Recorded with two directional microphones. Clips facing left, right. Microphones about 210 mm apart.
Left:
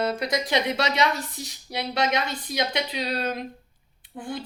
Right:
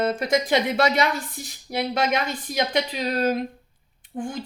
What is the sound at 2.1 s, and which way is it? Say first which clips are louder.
Speech: right 2 dB; 50° right (ahead or behind).